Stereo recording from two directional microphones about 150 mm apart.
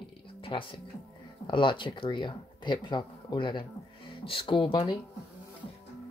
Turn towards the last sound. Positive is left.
turn(degrees=35)  # may be behind; listen again after turning